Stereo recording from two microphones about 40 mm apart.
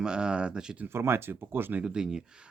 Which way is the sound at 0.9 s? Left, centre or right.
Right.